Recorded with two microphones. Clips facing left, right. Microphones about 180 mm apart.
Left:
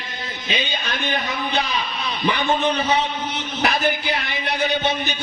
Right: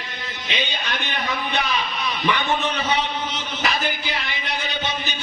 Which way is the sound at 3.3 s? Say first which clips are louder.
Left 6 dB; 60° left (ahead or behind).